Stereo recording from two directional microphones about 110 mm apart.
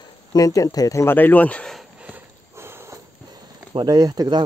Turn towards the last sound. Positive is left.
turn(degrees=-35)  # may be behind; listen again after turning